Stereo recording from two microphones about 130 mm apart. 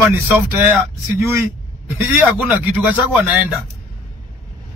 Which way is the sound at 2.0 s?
15° right (ahead or behind).